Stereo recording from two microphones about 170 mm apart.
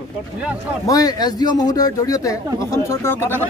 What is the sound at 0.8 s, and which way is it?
Speech, 20° left (ahead or behind).